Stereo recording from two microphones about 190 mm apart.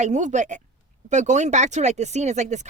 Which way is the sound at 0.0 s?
40° right (ahead or behind).